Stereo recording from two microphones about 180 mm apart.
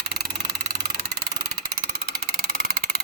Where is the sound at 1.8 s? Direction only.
55° right (ahead or behind).